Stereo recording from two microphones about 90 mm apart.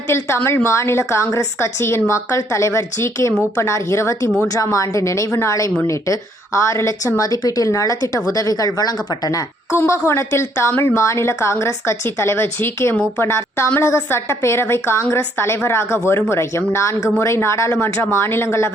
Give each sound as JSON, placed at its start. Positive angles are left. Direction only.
{"t": 0.1, "sound": "a woman's voice", "side_deg": 30}
{"t": 9.7, "sound": "a woman's voice", "side_deg": 30}